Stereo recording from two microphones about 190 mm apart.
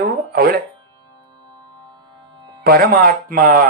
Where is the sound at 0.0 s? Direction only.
50° right (ahead or behind).